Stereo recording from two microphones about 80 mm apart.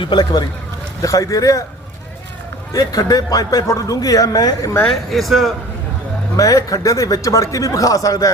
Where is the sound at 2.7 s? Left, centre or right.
Left.